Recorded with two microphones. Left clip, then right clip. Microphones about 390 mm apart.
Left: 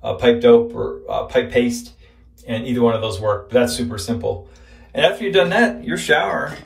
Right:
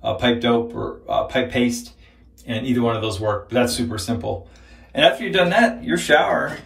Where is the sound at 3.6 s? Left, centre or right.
Centre.